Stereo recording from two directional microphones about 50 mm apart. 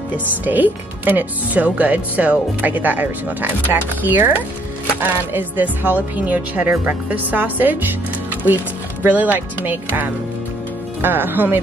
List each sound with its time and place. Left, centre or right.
0.5 s speech: right
9.0 s speech: right